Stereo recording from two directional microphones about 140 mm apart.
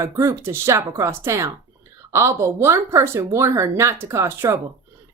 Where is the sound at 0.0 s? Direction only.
20° right (ahead or behind).